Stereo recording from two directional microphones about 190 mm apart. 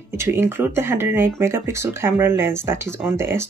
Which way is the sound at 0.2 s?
10° right (ahead or behind).